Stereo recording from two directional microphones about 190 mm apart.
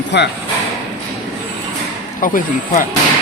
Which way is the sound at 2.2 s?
45° left (ahead or behind).